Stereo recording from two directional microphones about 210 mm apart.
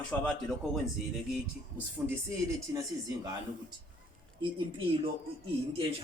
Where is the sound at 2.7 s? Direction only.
15° right (ahead or behind).